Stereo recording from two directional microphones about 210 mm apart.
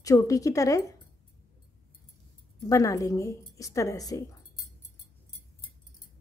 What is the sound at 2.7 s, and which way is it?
A woman's voice, 15° left (ahead or behind).